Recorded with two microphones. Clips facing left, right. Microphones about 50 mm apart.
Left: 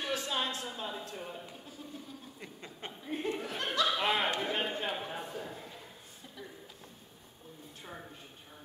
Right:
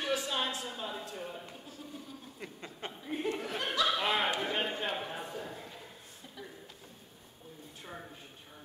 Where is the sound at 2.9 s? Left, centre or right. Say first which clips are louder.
Even; centre.